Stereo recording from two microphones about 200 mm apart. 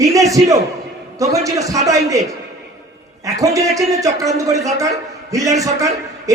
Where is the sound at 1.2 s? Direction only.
15° right (ahead or behind).